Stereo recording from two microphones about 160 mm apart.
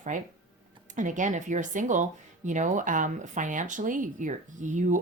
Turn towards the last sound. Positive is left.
turn(degrees=-50)  # may be behind; listen again after turning